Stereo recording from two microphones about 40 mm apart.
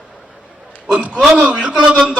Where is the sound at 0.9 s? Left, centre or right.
Right.